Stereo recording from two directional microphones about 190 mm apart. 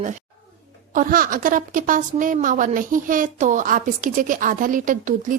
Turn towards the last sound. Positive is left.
turn(degrees=-45)  # may be behind; listen again after turning